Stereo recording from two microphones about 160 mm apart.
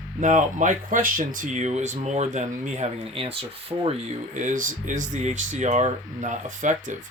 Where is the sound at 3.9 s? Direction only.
50° right (ahead or behind).